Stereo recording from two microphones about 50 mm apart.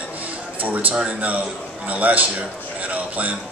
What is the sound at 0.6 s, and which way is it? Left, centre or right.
A man's voice, right.